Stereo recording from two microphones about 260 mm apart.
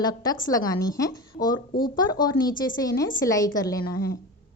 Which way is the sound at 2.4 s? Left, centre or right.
Left.